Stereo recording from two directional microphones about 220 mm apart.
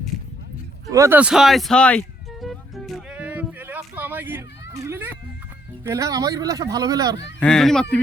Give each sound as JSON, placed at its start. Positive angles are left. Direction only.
{"t": 0.9, "sound": "a sound", "side_deg": -15}
{"t": 4.7, "sound": "children playing", "side_deg": -10}
{"t": 5.8, "sound": "speech", "side_deg": -15}
{"t": 7.3, "sound": "speech", "side_deg": 5}